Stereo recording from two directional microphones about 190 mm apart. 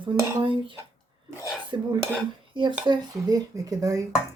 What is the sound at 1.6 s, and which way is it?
Dishes, 25° right (ahead or behind).